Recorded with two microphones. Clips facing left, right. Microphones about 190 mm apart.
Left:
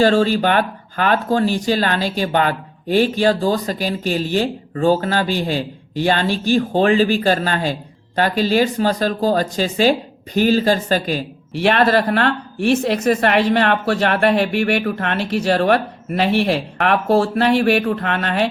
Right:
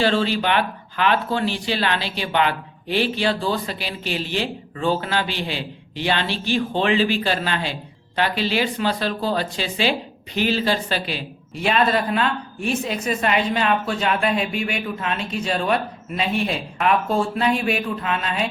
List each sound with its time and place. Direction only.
0.0 s speech: 45° left (ahead or behind)
11.6 s a woman's voice: 70° left (ahead or behind)